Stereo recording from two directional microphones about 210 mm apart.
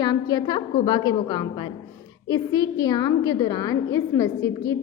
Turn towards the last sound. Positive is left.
turn(degrees=15)  # may be behind; listen again after turning